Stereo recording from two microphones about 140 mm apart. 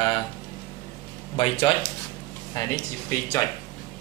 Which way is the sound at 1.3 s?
40° left (ahead or behind).